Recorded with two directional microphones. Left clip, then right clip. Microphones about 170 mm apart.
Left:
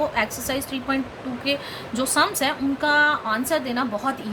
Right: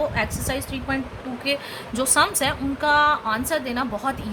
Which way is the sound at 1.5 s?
20° right (ahead or behind).